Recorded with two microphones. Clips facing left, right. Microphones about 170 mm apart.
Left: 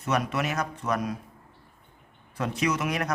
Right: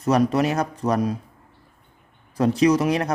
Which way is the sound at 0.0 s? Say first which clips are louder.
Right 8 dB; 35° right (ahead or behind).